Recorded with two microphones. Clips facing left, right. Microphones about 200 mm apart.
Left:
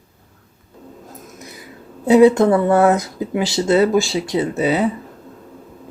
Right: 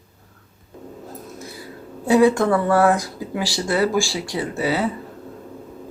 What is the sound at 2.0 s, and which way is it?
Speech, 20° left (ahead or behind).